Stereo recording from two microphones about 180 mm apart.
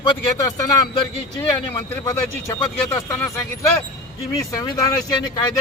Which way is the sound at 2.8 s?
15° left (ahead or behind).